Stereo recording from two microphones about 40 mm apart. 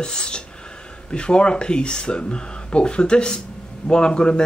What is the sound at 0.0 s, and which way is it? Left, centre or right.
A man's voice, left.